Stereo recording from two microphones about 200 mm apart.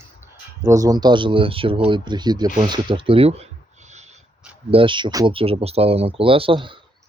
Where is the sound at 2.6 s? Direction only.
25° right (ahead or behind).